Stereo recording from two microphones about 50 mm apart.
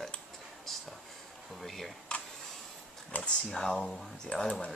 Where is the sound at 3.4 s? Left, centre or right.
Centre.